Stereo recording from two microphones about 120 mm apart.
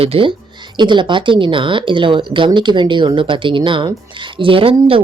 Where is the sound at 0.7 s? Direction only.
40° right (ahead or behind).